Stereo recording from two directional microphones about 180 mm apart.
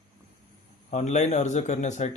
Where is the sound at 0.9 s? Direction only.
40° left (ahead or behind).